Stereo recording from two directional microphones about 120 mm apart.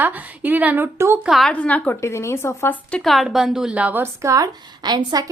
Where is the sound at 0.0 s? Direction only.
15° right (ahead or behind).